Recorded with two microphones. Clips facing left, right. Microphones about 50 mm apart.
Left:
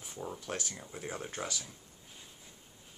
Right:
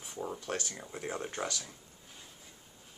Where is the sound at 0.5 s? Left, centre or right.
Centre.